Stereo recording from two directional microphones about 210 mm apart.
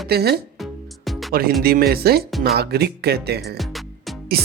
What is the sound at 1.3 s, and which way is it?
Speech, 45° right (ahead or behind).